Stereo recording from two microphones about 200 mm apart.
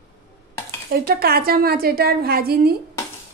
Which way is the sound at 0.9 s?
50° right (ahead or behind).